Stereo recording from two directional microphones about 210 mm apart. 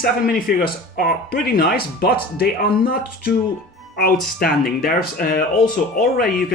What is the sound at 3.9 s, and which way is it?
A man's voice, 45° left (ahead or behind).